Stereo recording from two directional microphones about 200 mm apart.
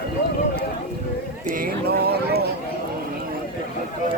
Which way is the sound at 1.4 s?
45° right (ahead or behind).